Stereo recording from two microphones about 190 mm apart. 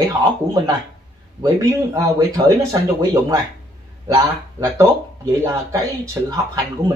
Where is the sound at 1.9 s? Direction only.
20° right (ahead or behind).